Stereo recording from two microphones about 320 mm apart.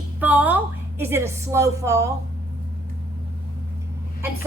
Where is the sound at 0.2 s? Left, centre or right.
Centre.